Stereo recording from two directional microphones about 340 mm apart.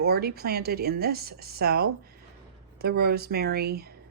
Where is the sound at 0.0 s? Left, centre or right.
Right.